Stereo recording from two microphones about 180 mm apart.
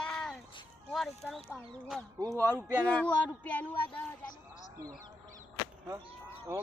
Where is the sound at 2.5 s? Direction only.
10° right (ahead or behind).